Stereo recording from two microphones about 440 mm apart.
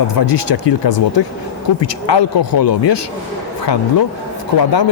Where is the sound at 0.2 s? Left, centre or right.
Left.